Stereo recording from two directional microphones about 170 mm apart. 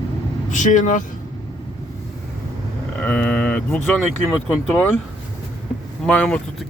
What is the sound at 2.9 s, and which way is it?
Speech, 5° left (ahead or behind).